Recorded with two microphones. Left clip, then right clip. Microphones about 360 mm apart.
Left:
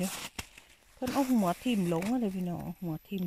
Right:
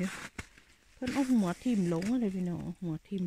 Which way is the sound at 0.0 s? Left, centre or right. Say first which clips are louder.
Left 2 dB; centre.